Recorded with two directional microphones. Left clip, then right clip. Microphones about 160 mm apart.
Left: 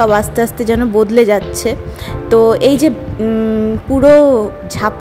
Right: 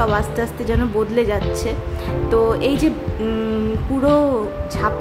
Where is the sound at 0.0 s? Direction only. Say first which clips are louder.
Left 8 dB; 45° left (ahead or behind).